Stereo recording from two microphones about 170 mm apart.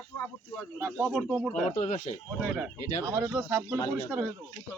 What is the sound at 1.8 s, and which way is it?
Speech, 35° left (ahead or behind).